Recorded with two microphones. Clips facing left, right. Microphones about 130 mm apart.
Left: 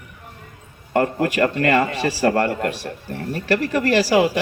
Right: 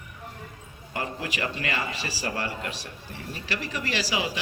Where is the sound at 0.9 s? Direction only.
55° left (ahead or behind).